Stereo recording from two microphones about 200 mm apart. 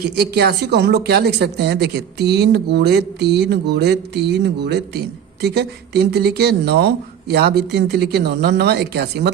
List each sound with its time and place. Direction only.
0.0 s a woman's voice: 50° right (ahead or behind)